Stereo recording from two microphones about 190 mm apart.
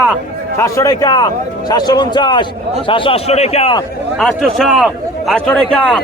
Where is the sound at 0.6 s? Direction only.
20° left (ahead or behind); by 3.8 s 35° left (ahead or behind).